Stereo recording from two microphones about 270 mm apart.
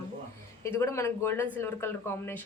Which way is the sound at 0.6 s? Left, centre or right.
Centre.